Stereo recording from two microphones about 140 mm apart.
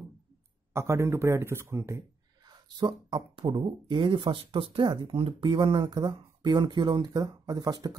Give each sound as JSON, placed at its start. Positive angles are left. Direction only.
{"t": 0.7, "sound": "a man's voice", "side_deg": -20}